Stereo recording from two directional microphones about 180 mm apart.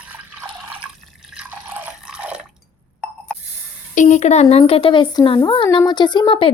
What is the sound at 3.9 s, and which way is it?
Speech, 40° left (ahead or behind).